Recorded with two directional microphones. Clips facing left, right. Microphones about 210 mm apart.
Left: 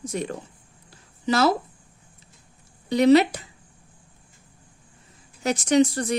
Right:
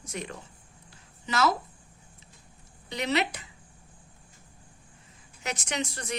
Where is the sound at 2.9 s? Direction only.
40° left (ahead or behind).